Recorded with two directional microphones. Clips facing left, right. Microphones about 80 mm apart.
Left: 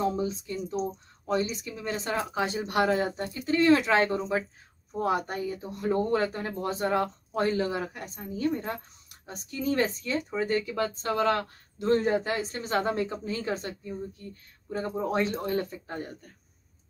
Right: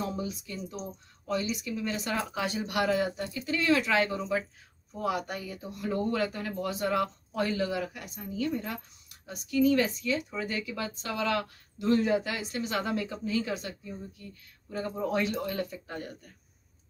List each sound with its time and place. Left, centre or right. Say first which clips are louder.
0.0 s speech: left 6 dB; left